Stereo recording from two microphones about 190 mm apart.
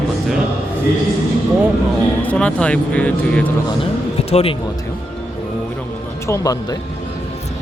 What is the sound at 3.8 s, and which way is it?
Speech, 30° left (ahead or behind).